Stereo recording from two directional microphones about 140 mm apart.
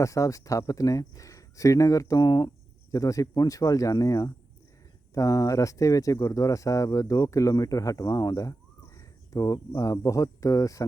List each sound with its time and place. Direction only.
0.0 s speech: 25° left (ahead or behind)